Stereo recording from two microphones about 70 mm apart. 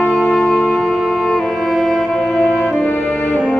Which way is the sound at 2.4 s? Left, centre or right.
Left.